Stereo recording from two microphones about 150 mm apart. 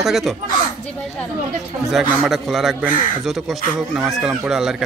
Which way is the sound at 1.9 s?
Centre (ahead or behind).